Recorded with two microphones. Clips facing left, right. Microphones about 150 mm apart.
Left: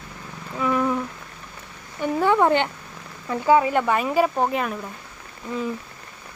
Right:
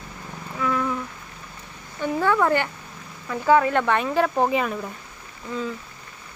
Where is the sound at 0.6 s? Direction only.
20° left (ahead or behind).